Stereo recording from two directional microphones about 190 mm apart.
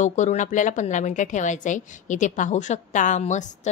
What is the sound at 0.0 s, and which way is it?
A woman's voice, 40° left (ahead or behind).